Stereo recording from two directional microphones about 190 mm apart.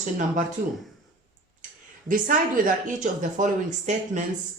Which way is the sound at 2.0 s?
45° right (ahead or behind).